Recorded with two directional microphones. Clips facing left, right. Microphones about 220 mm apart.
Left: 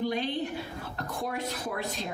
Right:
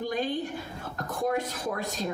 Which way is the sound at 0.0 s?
45° right (ahead or behind).